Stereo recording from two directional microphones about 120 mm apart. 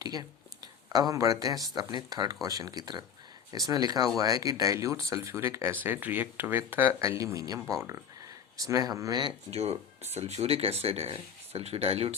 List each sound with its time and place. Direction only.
0.0 s a sound: 35° right (ahead or behind)
1.7 s speech: 35° right (ahead or behind)
9.5 s speech: 60° right (ahead or behind)